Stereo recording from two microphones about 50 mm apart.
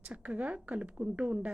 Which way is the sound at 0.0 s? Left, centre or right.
Right.